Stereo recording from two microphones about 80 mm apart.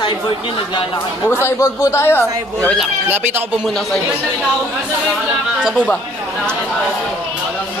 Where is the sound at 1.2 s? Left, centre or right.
Left.